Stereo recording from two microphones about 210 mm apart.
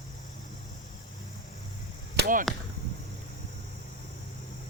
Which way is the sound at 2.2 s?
45° right (ahead or behind).